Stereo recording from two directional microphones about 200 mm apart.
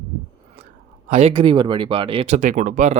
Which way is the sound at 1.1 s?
30° right (ahead or behind).